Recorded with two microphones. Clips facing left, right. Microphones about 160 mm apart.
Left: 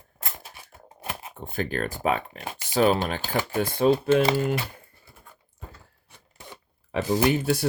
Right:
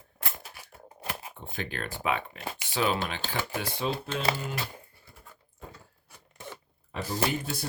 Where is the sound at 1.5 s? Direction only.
45° left (ahead or behind).